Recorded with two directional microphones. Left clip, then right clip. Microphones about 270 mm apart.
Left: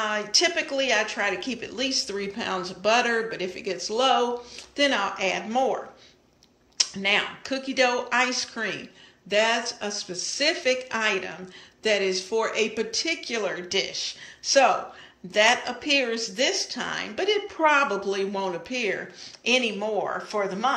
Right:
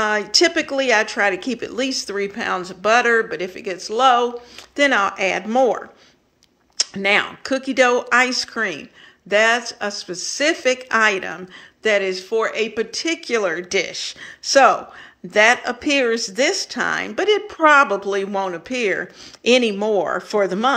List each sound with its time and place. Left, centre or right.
0.0 s speech: centre
6.8 s speech: centre
17.8 s speech: centre; by 20.7 s right